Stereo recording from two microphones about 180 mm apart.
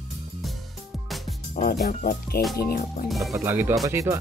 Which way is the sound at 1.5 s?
50° left (ahead or behind).